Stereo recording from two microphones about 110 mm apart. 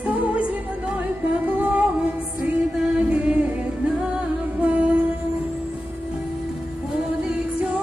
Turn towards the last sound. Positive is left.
turn(degrees=-5)  # may be behind; listen again after turning